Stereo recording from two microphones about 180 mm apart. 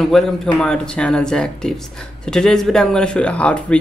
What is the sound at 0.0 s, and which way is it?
Speech, centre (ahead or behind).